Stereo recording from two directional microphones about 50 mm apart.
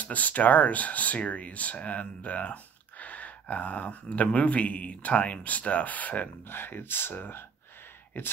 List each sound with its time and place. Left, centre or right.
0.0 s speech: left
6.5 s speech: left